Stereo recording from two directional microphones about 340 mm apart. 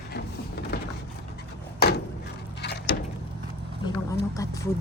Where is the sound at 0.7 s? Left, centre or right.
Left.